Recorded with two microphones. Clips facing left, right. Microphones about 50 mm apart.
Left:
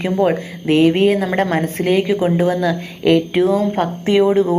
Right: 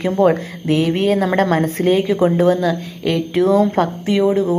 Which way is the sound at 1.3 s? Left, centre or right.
Left.